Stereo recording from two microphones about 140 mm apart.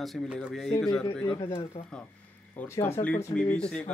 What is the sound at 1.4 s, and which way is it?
Speech, 40° left (ahead or behind).